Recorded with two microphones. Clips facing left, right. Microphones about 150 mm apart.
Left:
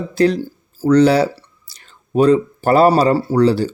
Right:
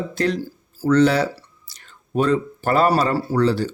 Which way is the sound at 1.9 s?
35° left (ahead or behind).